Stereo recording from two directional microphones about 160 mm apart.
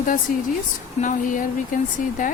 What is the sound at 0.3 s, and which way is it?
A woman's voice, 55° left (ahead or behind).